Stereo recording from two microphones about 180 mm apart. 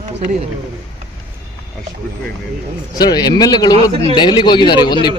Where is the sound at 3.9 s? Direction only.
30° right (ahead or behind).